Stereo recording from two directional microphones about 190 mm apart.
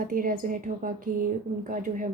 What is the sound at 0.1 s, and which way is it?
Speech, 45° right (ahead or behind).